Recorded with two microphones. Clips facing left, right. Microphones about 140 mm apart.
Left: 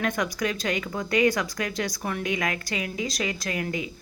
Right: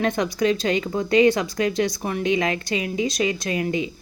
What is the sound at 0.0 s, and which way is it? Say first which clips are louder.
Speech: right 6 dB; 25° right (ahead or behind).